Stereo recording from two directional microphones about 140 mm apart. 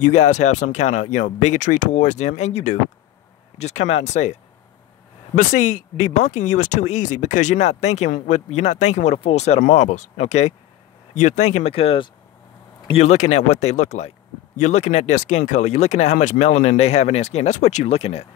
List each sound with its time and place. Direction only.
0.0 s speech: 60° left (ahead or behind)